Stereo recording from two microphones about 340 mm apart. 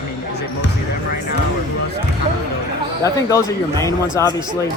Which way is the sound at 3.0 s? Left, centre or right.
Centre.